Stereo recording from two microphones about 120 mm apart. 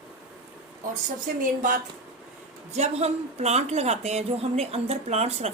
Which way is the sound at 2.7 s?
65° right (ahead or behind).